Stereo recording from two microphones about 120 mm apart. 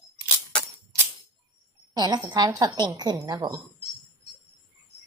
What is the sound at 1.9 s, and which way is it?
A woman's voice, 35° right (ahead or behind).